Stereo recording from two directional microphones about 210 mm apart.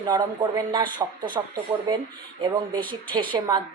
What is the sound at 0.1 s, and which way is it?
Speech, 20° right (ahead or behind).